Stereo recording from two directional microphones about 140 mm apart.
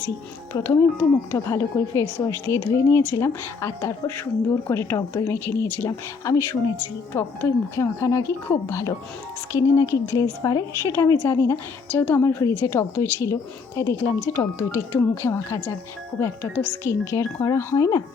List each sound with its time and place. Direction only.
0.6 s a woman's voice: 15° left (ahead or behind)
14.3 s a woman's voice: 15° left (ahead or behind)